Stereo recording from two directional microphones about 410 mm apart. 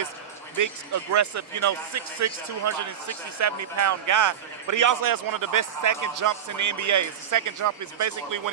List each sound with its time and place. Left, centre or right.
0.6 s speech: right